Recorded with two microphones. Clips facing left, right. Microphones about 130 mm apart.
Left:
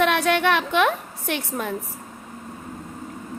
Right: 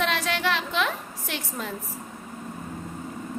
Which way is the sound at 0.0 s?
60° left (ahead or behind).